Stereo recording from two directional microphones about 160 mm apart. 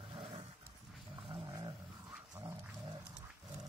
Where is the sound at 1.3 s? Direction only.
25° right (ahead or behind).